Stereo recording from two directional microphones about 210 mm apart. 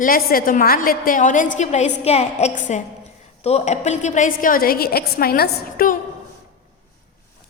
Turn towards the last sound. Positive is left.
turn(degrees=40)  # may be behind; listen again after turning